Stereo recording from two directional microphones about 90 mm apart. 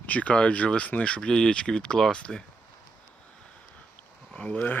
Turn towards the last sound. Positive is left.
turn(degrees=15)  # may be behind; listen again after turning